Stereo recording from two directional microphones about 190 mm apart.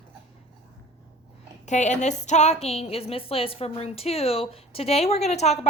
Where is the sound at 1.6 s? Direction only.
40° left (ahead or behind).